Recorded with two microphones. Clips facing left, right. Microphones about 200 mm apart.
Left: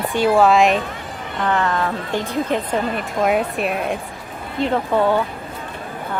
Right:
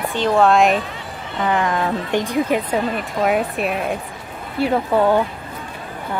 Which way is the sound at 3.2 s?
Centre (ahead or behind).